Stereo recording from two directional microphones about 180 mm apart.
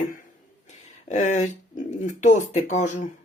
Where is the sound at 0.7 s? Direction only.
40° left (ahead or behind).